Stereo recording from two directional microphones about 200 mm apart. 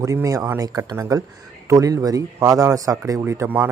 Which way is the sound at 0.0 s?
15° right (ahead or behind).